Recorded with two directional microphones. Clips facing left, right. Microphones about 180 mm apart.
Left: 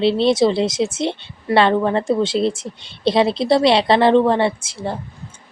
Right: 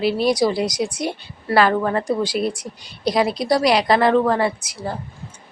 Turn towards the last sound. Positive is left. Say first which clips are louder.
# left 2 dB
turn(degrees=25)  # may be behind; listen again after turning